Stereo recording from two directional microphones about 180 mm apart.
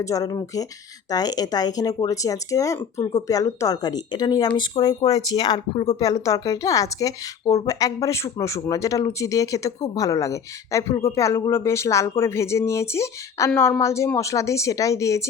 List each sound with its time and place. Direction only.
0.0 s speech: 20° left (ahead or behind)